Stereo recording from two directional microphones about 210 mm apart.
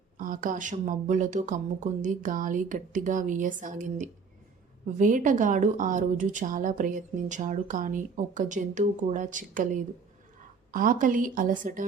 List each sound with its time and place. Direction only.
0.2 s speech: 40° right (ahead or behind)